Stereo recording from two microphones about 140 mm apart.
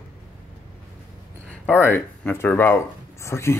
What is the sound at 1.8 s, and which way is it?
Speech, 15° left (ahead or behind).